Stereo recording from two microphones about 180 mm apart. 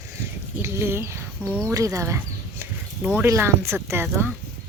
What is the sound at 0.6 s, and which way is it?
Speech, 15° right (ahead or behind).